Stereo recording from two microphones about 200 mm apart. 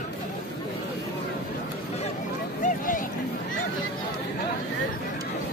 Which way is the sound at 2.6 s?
40° left (ahead or behind).